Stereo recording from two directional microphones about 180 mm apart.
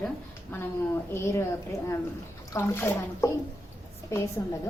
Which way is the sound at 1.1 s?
15° left (ahead or behind).